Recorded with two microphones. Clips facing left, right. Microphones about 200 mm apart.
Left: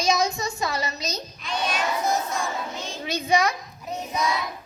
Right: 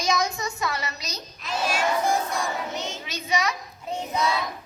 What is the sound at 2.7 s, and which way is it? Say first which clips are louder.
Child singing: right 2 dB; 20° right (ahead or behind).